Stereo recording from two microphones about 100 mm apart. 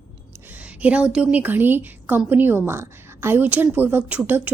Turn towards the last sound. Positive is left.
turn(degrees=-15)  # may be behind; listen again after turning